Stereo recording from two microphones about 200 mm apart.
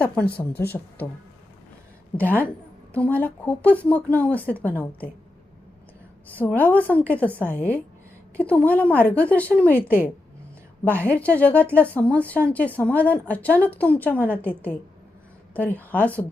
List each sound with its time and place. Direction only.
0.0 s a woman's voice: 5° left (ahead or behind)
2.1 s a woman's voice: 10° left (ahead or behind)
6.3 s a woman's voice: 10° left (ahead or behind)
11.0 s a woman's voice: 10° left (ahead or behind)